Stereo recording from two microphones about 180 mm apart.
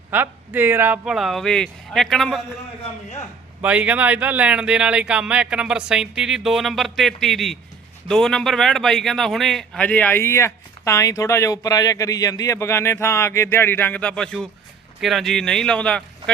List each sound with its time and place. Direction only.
0.1 s speech: 10° right (ahead or behind)
3.6 s a man's voice: 10° right (ahead or behind)